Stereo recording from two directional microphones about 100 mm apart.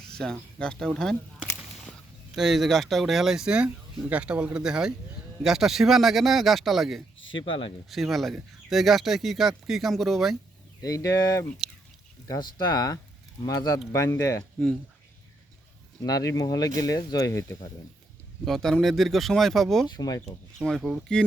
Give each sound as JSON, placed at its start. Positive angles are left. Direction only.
{"t": 0.1, "sound": "speech", "side_deg": 5}
{"t": 2.3, "sound": "speech", "side_deg": -5}
{"t": 7.3, "sound": "speech", "side_deg": 65}
{"t": 7.9, "sound": "speech", "side_deg": 0}
{"t": 10.8, "sound": "speech", "side_deg": 35}
{"t": 12.3, "sound": "speech", "side_deg": 45}
{"t": 16.0, "sound": "speech", "side_deg": 40}
{"t": 18.4, "sound": "speech", "side_deg": 5}
{"t": 20.0, "sound": "speech", "side_deg": 40}
{"t": 20.7, "sound": "speech", "side_deg": 0}